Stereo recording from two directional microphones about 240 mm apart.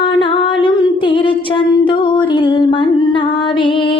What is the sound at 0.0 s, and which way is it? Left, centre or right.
Singing, left.